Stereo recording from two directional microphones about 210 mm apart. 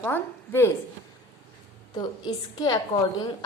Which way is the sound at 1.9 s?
20° left (ahead or behind).